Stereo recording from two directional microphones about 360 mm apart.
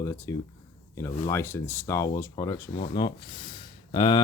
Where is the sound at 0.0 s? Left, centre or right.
Centre.